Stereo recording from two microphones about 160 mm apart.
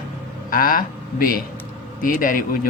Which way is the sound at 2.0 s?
60° left (ahead or behind).